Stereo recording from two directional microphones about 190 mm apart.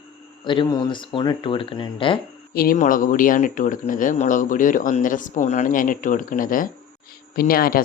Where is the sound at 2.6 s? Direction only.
45° left (ahead or behind).